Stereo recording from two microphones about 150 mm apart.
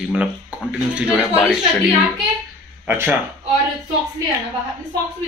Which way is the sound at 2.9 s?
10° right (ahead or behind).